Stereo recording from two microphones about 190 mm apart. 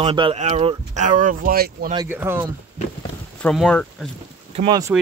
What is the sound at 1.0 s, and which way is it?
Speech, 45° right (ahead or behind).